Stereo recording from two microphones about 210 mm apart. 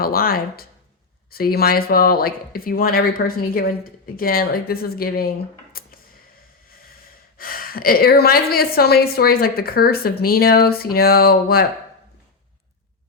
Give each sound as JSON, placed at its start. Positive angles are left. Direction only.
{"t": 0.0, "sound": "a woman's voice", "side_deg": 45}
{"t": 5.7, "sound": "a sound", "side_deg": 45}
{"t": 7.3, "sound": "a woman's voice", "side_deg": 45}